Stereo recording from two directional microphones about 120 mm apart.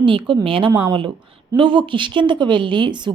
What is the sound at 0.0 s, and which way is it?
A woman's voice, 45° right (ahead or behind).